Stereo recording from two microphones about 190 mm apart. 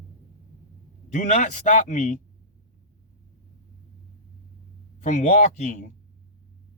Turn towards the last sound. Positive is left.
turn(degrees=40)  # may be behind; listen again after turning